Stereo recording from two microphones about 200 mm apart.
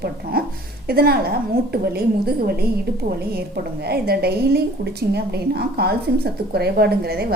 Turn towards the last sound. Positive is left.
turn(degrees=-50)  # may be behind; listen again after turning